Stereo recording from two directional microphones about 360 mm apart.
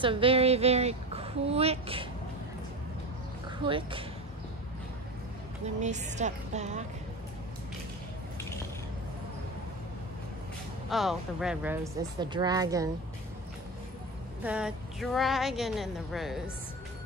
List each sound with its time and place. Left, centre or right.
0.0 s speech: centre
3.6 s speech: centre
5.8 s a woman's voice: centre
10.9 s speech: centre
14.4 s a woman's voice: centre